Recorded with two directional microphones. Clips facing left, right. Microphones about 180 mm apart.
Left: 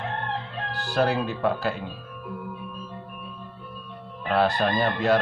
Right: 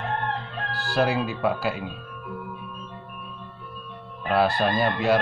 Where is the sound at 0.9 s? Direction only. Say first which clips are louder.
Even; 10° right (ahead or behind).